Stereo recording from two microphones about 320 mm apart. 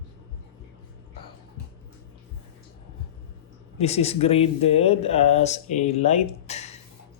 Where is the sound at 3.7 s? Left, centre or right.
Centre.